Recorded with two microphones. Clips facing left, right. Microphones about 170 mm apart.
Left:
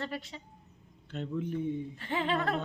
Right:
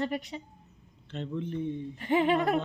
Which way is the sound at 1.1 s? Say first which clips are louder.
Even; 5° left (ahead or behind).